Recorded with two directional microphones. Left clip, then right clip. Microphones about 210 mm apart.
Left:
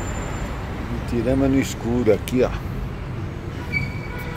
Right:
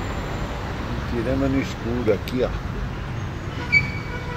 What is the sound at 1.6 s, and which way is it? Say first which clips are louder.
Speech: left 3 dB; 30° left (ahead or behind).